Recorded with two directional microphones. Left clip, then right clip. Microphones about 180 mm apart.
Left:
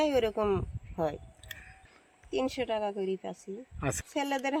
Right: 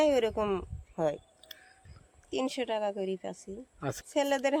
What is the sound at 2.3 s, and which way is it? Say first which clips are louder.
Speech: left 1 dB; 25° right (ahead or behind).